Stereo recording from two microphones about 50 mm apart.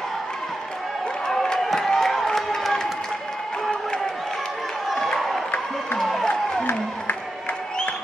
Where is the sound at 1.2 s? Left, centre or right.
Centre.